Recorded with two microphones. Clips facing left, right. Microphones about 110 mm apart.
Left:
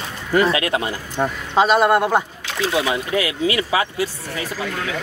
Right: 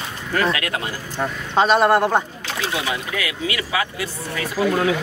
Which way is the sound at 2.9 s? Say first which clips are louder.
Left 5 dB; 30° left (ahead or behind).